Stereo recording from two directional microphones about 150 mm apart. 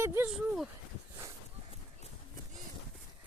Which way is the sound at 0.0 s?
15° right (ahead or behind).